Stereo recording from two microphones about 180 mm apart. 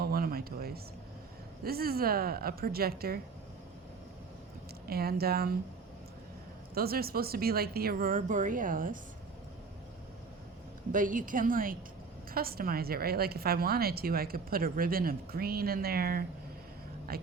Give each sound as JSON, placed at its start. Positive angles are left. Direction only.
{"t": 0.0, "sound": "a sound", "side_deg": -55}
{"t": 1.6, "sound": "a woman's voice", "side_deg": -55}
{"t": 4.9, "sound": "a woman's voice", "side_deg": -60}
{"t": 6.7, "sound": "a woman's voice", "side_deg": -55}
{"t": 10.9, "sound": "a woman's voice", "side_deg": -50}